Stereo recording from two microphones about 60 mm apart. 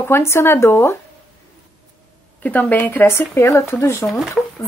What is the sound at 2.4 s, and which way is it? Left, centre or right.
Speech, left.